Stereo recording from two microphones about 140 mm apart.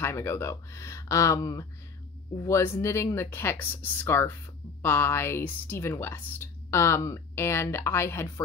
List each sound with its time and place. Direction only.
0.0 s a woman's voice: 20° left (ahead or behind)